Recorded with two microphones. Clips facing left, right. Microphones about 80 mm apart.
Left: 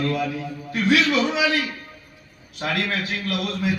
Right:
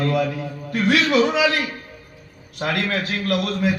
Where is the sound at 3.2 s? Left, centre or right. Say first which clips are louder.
Right 4 dB; right.